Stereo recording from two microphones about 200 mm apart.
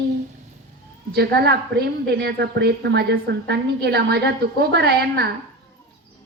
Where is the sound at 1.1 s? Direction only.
55° right (ahead or behind).